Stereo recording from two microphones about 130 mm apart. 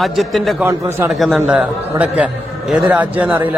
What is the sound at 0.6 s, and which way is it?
Speech, 20° right (ahead or behind).